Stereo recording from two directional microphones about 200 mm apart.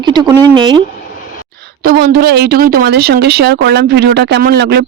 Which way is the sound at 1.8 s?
50° right (ahead or behind).